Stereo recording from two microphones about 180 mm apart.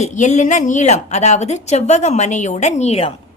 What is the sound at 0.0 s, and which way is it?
A woman's voice, 40° left (ahead or behind).